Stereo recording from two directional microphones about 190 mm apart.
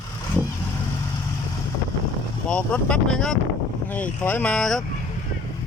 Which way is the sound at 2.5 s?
5° left (ahead or behind).